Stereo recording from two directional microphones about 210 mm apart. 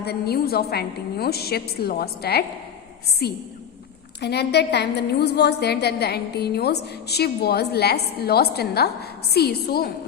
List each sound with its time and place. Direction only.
0.0 s a woman's voice: 50° left (ahead or behind)